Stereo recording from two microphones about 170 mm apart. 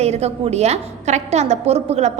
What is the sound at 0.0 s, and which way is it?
A woman's voice, 40° right (ahead or behind).